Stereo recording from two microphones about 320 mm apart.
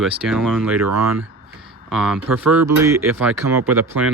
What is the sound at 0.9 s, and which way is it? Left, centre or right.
Speech, right.